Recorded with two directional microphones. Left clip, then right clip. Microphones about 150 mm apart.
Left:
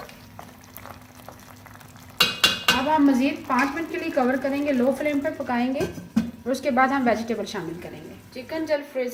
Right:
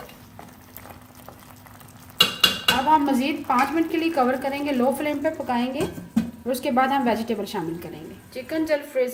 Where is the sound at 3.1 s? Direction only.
60° right (ahead or behind).